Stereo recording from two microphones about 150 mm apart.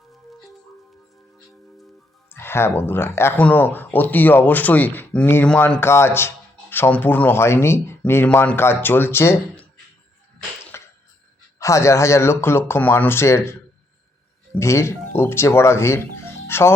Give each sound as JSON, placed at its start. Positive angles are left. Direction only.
{"t": 2.3, "sound": "speech", "side_deg": 15}
{"t": 10.7, "sound": "a sound", "side_deg": 15}
{"t": 11.6, "sound": "speech", "side_deg": 20}
{"t": 14.6, "sound": "speech", "side_deg": 20}